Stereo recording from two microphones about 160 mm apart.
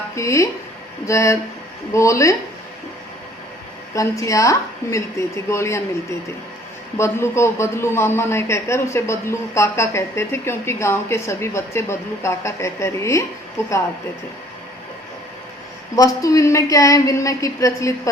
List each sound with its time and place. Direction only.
0.2 s a woman's voice: 20° left (ahead or behind)
4.2 s a woman's voice: 20° left (ahead or behind)
16.0 s a woman's voice: 20° left (ahead or behind)